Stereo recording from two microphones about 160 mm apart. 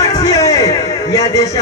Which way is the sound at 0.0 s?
20° left (ahead or behind).